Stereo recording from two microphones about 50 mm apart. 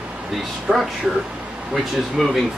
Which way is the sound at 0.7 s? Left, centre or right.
Right.